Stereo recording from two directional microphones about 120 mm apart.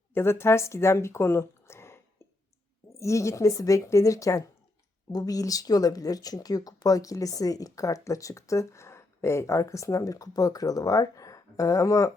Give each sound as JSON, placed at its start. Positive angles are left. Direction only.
{"t": 0.1, "sound": "speech", "side_deg": 20}
{"t": 3.0, "sound": "speech", "side_deg": 25}